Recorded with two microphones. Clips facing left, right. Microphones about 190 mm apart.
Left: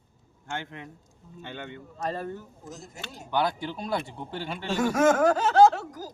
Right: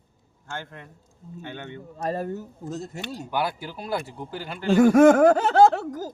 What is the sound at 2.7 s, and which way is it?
Speech, 65° right (ahead or behind).